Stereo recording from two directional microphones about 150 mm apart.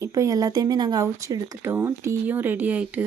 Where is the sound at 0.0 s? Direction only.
20° right (ahead or behind).